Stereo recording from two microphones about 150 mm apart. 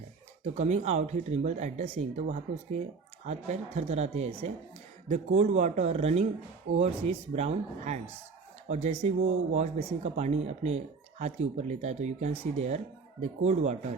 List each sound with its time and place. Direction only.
0.4 s speech: 50° right (ahead or behind)